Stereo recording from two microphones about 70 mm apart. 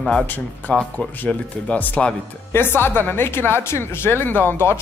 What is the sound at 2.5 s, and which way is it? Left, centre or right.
Speech, left.